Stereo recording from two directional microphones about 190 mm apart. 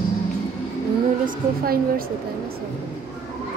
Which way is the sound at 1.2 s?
50° right (ahead or behind).